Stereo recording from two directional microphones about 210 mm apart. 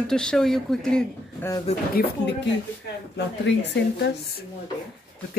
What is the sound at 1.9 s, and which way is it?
A woman's voice, 50° left (ahead or behind).